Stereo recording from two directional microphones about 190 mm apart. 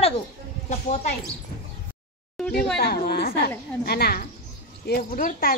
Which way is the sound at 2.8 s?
55° left (ahead or behind).